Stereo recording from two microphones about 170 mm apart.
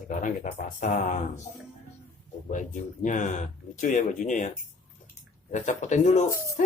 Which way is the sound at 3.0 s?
45° left (ahead or behind).